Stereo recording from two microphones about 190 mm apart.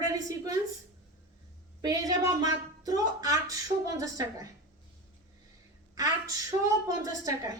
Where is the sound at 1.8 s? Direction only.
20° right (ahead or behind).